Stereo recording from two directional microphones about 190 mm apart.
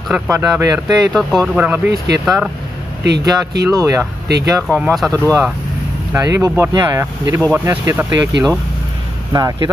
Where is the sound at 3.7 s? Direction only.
15° right (ahead or behind).